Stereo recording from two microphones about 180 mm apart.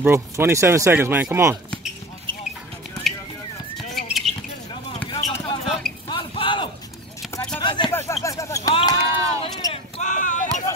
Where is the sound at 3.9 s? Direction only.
Centre (ahead or behind).